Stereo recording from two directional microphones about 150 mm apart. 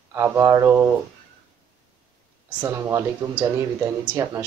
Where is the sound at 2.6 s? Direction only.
20° right (ahead or behind).